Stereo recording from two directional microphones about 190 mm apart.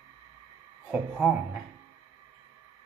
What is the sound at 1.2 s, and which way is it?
Speech, 10° right (ahead or behind).